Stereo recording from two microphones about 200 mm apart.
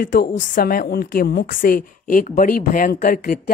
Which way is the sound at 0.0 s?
40° left (ahead or behind).